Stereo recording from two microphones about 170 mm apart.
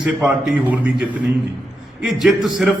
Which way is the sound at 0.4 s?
10° right (ahead or behind).